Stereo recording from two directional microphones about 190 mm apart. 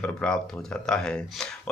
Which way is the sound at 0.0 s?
5° left (ahead or behind).